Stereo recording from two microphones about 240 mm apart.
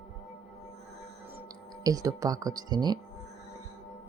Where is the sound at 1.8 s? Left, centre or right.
Centre.